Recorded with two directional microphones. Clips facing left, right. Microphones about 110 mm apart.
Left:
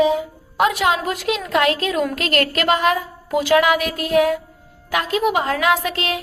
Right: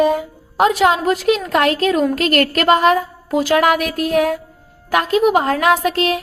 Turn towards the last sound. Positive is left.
turn(degrees=-45)  # may be behind; listen again after turning